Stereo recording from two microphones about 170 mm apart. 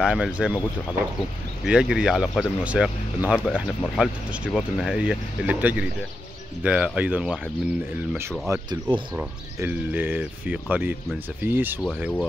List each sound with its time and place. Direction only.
0.0 s speech: 5° right (ahead or behind)
1.7 s speech: 5° right (ahead or behind)
8.2 s speech: 15° right (ahead or behind)
8.6 s speech: 25° right (ahead or behind)
9.1 s speech: 10° right (ahead or behind)